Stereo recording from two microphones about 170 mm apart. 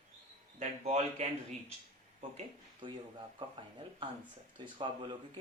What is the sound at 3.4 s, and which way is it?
Speech, 30° right (ahead or behind).